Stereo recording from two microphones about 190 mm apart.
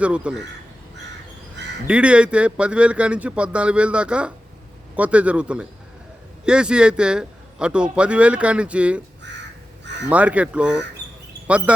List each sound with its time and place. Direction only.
0.0 s speech: 5° right (ahead or behind)
1.9 s speech: 5° right (ahead or behind)
9.3 s crow: 65° right (ahead or behind)
10.1 s speech: 5° right (ahead or behind)